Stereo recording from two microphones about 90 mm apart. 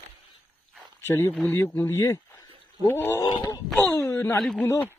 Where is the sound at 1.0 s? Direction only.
25° left (ahead or behind).